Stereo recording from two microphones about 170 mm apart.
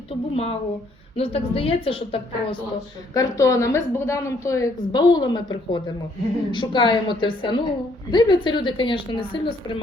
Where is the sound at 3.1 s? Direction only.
20° left (ahead or behind).